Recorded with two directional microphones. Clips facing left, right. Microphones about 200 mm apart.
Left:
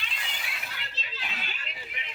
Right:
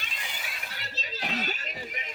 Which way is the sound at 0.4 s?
40° right (ahead or behind).